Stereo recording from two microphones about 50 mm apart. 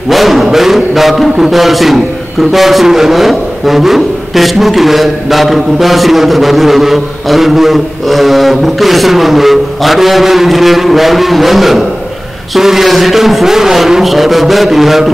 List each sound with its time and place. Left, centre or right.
0.1 s music: centre
1.4 s a man's voice: centre